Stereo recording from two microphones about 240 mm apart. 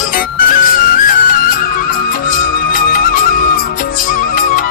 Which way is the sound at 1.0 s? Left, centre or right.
Left.